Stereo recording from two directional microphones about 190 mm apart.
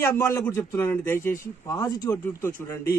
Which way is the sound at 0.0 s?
15° left (ahead or behind).